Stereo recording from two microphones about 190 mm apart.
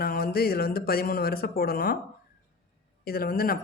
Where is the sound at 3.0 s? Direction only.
50° left (ahead or behind).